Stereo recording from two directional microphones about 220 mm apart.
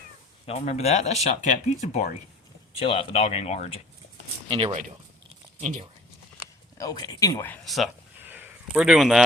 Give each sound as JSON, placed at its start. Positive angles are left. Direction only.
{"t": 0.4, "sound": "speech", "side_deg": 30}
{"t": 4.4, "sound": "speech", "side_deg": -25}
{"t": 6.3, "sound": "a sound", "side_deg": 15}